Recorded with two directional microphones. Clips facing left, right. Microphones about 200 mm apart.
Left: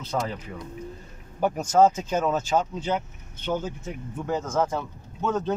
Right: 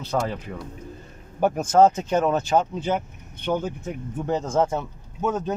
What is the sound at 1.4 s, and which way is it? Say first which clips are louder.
Speech: right 2 dB; 50° right (ahead or behind).